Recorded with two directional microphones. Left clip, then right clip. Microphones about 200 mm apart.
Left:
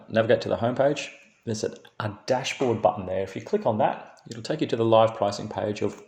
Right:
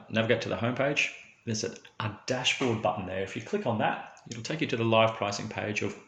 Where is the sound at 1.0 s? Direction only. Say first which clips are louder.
Right 1 dB; 45° left (ahead or behind).